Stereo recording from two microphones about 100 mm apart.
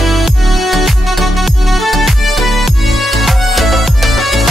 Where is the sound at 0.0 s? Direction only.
Centre (ahead or behind).